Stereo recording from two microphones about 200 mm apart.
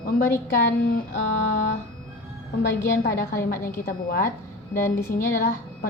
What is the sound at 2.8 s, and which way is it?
Speech, 50° left (ahead or behind).